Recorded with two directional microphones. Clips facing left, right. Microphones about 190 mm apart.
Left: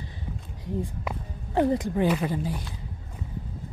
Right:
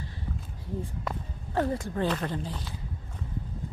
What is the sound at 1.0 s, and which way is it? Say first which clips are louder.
Speech: left 1 dB; 15° left (ahead or behind).